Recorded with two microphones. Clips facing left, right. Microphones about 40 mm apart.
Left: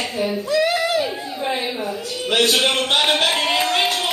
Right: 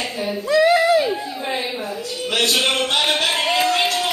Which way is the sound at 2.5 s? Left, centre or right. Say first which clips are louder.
Left 1 dB; centre.